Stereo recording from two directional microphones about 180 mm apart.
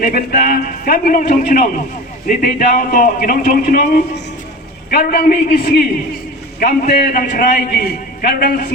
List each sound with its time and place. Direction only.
0.0 s a man's voice: 55° left (ahead or behind)
4.9 s a man's voice: 55° left (ahead or behind)